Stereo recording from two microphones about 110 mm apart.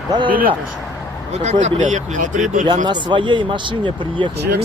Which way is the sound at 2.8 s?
45° right (ahead or behind).